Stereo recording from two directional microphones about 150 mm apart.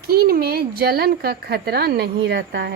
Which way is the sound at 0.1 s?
90° right.